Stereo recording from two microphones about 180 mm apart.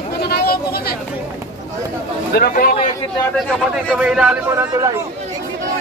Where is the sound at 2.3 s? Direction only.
55° left (ahead or behind).